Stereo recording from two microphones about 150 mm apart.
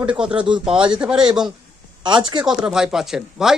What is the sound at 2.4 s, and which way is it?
Speech, 5° right (ahead or behind).